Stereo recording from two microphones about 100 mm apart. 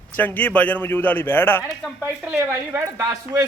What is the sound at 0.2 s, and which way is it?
A man's voice, 15° left (ahead or behind).